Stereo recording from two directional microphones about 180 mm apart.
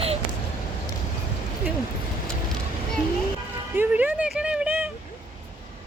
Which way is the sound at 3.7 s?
10° right (ahead or behind).